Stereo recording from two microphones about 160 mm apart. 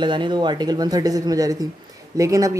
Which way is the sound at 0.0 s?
30° right (ahead or behind).